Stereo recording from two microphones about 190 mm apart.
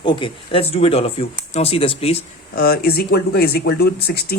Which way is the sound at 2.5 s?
50° left (ahead or behind).